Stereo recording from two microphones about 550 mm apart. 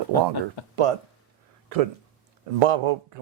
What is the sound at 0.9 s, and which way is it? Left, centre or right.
Speech, right.